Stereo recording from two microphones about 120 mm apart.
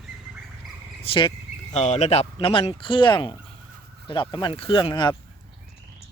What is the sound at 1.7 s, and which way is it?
Speech, 70° left (ahead or behind).